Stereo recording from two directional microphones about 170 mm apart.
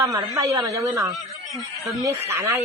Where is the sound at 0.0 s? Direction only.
20° right (ahead or behind).